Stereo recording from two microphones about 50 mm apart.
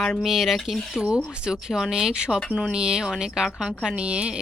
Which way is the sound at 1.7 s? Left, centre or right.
Centre.